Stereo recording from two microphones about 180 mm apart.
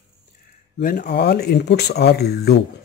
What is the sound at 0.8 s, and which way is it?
Speech, 45° left (ahead or behind).